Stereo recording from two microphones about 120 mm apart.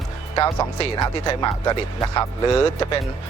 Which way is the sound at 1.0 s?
30° left (ahead or behind).